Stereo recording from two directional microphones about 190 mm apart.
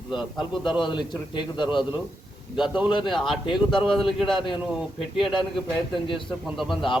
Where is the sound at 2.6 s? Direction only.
5° right (ahead or behind).